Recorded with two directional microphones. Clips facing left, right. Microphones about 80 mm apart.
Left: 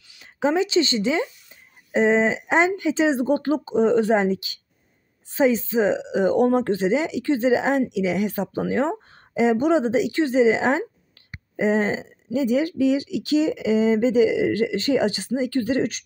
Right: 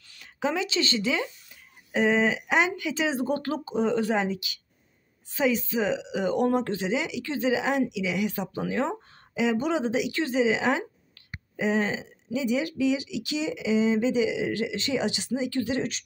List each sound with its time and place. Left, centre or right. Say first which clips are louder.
0.2 s speech: left 7 dB; left